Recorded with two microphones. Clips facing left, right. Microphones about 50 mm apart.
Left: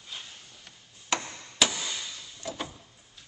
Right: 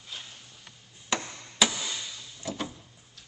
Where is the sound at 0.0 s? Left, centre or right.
Centre.